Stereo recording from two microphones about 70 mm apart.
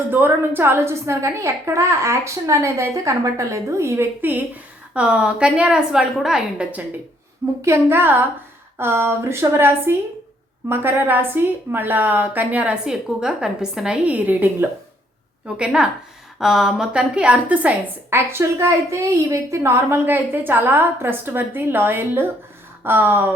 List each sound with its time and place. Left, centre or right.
0.1 s a woman's voice: right
4.2 s a woman's voice: right
4.9 s a woman's voice: centre
7.6 s a woman's voice: right
12.8 s a woman's voice: centre
15.4 s a woman's voice: centre; by 23.3 s right